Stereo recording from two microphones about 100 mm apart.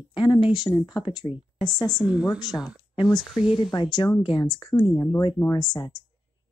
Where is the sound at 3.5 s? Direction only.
50° left (ahead or behind).